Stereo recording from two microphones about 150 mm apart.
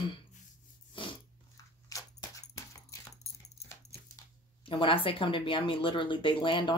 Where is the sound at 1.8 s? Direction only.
20° left (ahead or behind).